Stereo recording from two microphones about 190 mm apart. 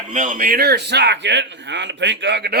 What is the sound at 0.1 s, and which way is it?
Speech, 40° right (ahead or behind).